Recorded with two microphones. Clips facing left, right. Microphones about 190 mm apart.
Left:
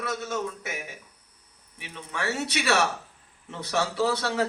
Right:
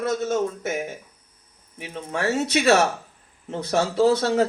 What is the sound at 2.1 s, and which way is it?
Speech, 45° right (ahead or behind).